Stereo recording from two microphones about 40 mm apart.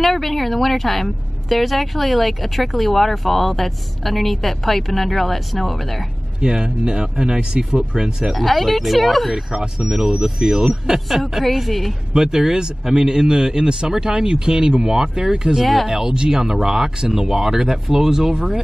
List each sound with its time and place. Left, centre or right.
0.0 s a woman's voice: centre
6.4 s speech: centre
8.4 s a woman's voice: centre
9.5 s speech: right
11.4 s a woman's voice: centre
12.1 s speech: centre
15.6 s a woman's voice: centre
15.9 s speech: centre